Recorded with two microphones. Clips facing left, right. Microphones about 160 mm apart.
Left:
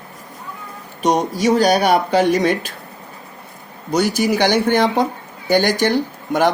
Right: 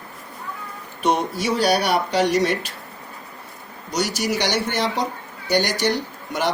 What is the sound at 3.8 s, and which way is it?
Speech, 55° left (ahead or behind).